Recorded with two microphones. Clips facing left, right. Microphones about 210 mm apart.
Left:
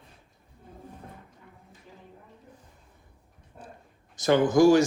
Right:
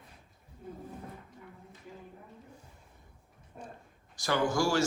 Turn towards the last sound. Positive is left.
turn(degrees=20)  # may be behind; listen again after turning